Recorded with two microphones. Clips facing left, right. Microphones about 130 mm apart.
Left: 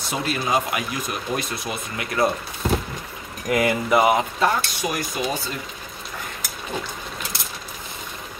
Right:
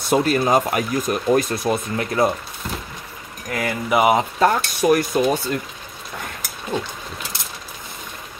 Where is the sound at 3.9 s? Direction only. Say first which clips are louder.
Right 2 dB; 15° right (ahead or behind).